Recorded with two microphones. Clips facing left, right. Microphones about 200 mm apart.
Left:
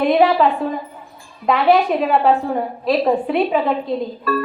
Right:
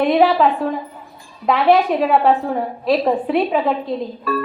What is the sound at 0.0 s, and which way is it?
A woman's voice, centre (ahead or behind).